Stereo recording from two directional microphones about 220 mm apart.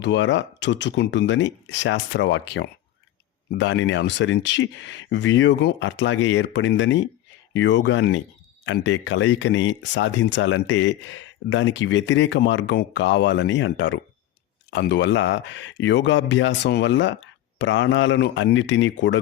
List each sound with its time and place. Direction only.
0.0 s speech: 55° left (ahead or behind)